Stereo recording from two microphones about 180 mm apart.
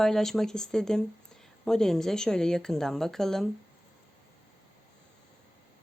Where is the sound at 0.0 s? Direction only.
Centre (ahead or behind).